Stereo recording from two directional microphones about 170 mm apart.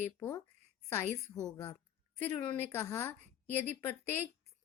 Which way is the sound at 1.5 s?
15° left (ahead or behind).